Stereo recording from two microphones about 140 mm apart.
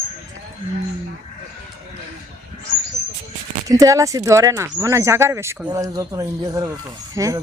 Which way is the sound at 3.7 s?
25° right (ahead or behind).